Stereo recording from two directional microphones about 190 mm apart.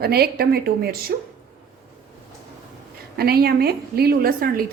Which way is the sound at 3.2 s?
55° right (ahead or behind).